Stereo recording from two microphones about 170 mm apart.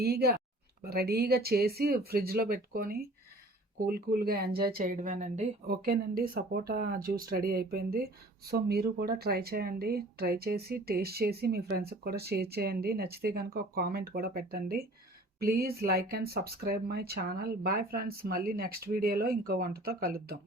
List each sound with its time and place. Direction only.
0.0 s speech: 70° right (ahead or behind); by 5.5 s 45° right (ahead or behind)
5.6 s speech: 60° right (ahead or behind)